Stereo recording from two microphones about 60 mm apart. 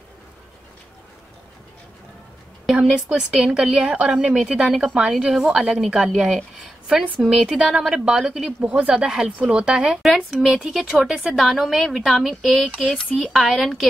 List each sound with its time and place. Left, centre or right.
2.6 s a woman's voice: centre
10.3 s a woman's voice: centre